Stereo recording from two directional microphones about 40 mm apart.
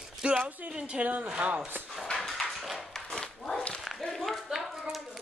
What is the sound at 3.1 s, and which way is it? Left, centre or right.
Dog, centre.